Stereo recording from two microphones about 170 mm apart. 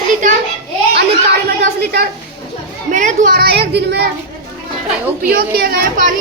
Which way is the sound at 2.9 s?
50° right (ahead or behind).